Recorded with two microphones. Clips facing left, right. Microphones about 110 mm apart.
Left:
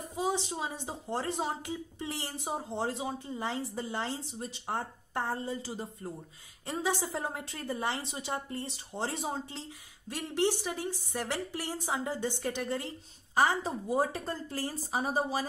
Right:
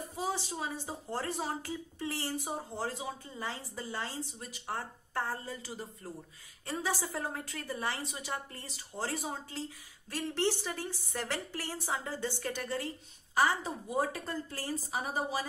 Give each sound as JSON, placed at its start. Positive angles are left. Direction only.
{"t": 0.1, "sound": "a woman's voice", "side_deg": 20}